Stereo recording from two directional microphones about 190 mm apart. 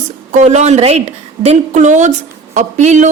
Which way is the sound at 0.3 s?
40° right (ahead or behind).